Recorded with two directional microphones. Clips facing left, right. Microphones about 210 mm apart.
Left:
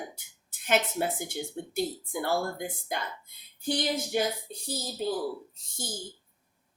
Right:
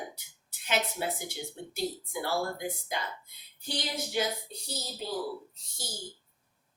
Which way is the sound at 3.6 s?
50° left (ahead or behind).